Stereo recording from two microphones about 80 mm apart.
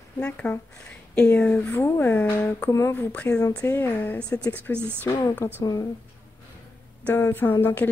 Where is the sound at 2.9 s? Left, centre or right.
Centre.